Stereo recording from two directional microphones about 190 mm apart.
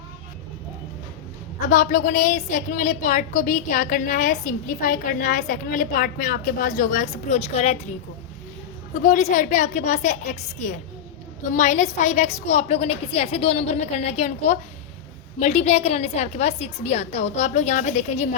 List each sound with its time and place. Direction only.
1.6 s a woman's voice: 40° left (ahead or behind)
9.0 s a woman's voice: 40° left (ahead or behind)